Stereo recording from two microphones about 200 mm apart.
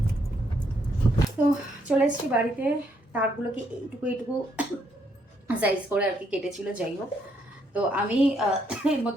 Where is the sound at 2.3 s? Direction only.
10° right (ahead or behind).